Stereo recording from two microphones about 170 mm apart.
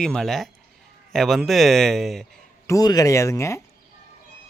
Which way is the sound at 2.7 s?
20° left (ahead or behind).